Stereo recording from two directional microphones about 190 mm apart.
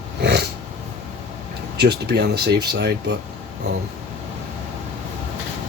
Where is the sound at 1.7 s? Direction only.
60° right (ahead or behind).